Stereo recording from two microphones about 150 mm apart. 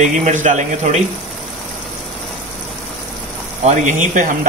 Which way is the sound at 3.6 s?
55° right (ahead or behind).